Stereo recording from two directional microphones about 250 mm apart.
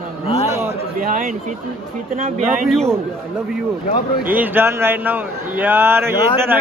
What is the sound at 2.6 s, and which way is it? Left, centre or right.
Speech, centre.